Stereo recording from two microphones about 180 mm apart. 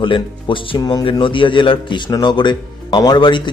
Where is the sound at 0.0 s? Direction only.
30° left (ahead or behind).